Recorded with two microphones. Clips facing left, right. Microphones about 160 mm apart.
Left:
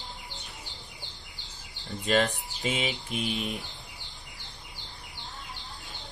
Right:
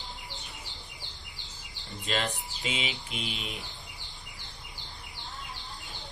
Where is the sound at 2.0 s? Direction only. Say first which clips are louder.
Left 7 dB; 40° left (ahead or behind).